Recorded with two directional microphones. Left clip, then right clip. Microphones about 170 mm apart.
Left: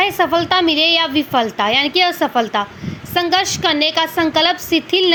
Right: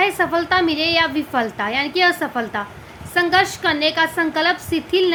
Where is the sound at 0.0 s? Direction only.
20° left (ahead or behind).